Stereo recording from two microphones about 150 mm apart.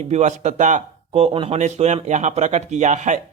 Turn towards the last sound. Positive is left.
turn(degrees=-50)  # may be behind; listen again after turning